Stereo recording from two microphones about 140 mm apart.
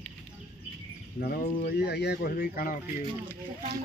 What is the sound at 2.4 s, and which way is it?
Speech, 90° left.